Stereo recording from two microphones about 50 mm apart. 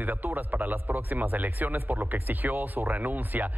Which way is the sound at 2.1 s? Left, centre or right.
Right.